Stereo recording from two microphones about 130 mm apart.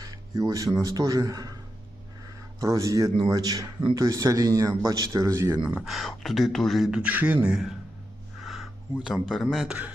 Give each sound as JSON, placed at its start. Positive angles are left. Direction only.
{"t": 0.0, "sound": "speech", "side_deg": -25}
{"t": 2.6, "sound": "speech", "side_deg": -25}
{"t": 5.6, "sound": "speech", "side_deg": -5}
{"t": 8.4, "sound": "a sound", "side_deg": 0}
{"t": 9.0, "sound": "speech", "side_deg": 0}